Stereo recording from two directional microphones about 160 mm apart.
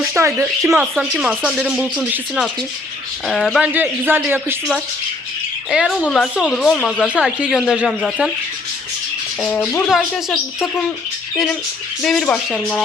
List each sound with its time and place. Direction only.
0.0 s speech: 15° right (ahead or behind)
0.8 s speech: 5° right (ahead or behind)
3.7 s speech: 10° right (ahead or behind)
9.4 s speech: 10° left (ahead or behind)
9.9 s speech: centre (ahead or behind)
12.0 s speech: 5° left (ahead or behind)